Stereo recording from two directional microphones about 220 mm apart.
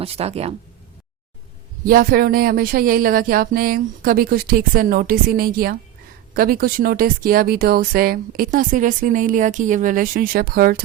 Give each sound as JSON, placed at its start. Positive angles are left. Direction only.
{"t": 0.0, "sound": "speech", "side_deg": -30}
{"t": 1.8, "sound": "speech", "side_deg": -40}